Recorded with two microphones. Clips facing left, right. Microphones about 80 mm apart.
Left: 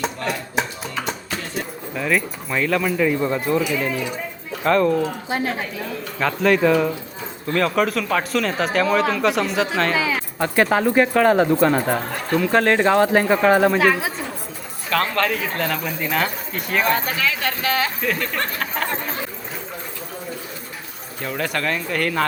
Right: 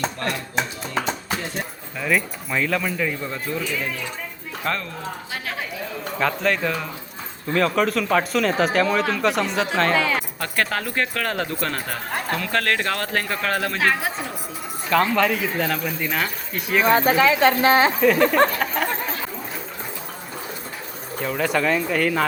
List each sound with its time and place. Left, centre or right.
0.0 s speech: centre
5.3 s speech: left
6.1 s speech: centre
10.4 s speech: centre
13.7 s speech: centre
14.8 s speech: centre
16.9 s speech: right
18.0 s speech: centre
18.6 s chatter: centre
21.2 s speech: centre